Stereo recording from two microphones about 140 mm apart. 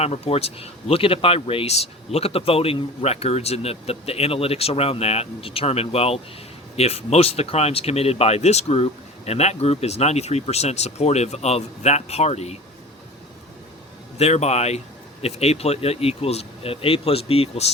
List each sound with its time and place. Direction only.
0.0 s speech: 45° left (ahead or behind)
14.2 s speech: 50° left (ahead or behind)